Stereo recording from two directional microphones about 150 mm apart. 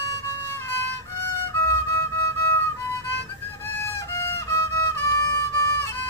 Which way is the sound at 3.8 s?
15° left (ahead or behind).